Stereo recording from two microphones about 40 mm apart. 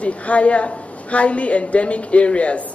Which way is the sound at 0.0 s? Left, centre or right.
Left.